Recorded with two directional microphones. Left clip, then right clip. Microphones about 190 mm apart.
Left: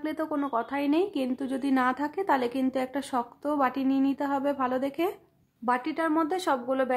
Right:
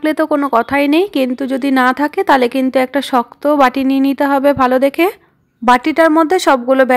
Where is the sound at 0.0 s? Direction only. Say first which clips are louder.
Right 16 dB; 35° right (ahead or behind).